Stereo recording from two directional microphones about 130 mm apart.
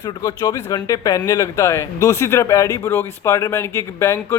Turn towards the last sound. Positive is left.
turn(degrees=25)  # may be behind; listen again after turning